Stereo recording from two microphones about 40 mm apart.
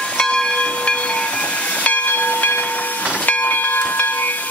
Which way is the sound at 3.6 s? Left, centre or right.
Left.